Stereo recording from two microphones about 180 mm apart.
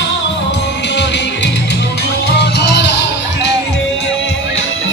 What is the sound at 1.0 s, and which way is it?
Music, 75° left (ahead or behind).